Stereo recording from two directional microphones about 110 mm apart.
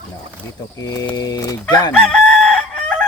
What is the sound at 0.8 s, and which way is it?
Speech, 30° left (ahead or behind).